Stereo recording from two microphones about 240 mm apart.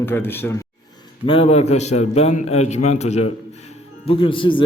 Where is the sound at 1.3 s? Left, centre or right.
Left.